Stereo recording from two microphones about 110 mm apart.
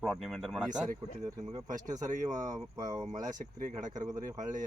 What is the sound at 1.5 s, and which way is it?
Speech, 35° right (ahead or behind).